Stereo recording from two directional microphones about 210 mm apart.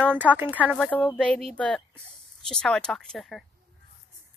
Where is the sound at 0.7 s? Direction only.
5° left (ahead or behind).